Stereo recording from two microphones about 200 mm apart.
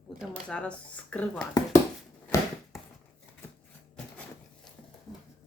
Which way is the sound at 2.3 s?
15° left (ahead or behind).